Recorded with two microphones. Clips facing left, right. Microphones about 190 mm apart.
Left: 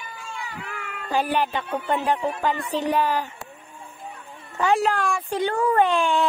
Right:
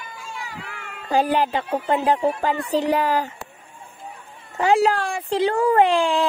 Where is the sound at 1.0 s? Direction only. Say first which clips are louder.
Right 4 dB; 35° right (ahead or behind).